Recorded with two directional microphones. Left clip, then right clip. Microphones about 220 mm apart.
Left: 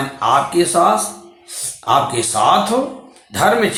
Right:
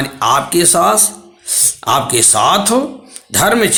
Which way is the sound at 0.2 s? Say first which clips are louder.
Right 1 dB; 55° right (ahead or behind).